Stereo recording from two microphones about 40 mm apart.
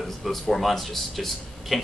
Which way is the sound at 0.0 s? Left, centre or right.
Centre.